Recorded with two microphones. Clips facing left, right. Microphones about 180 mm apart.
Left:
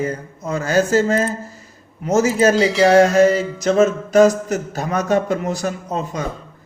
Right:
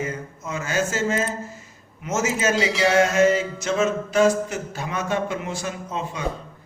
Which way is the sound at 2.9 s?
35° left (ahead or behind).